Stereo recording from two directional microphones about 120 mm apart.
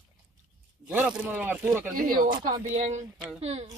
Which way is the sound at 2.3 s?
40° right (ahead or behind).